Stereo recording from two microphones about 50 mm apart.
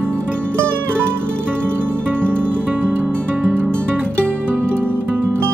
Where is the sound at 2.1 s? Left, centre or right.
Right.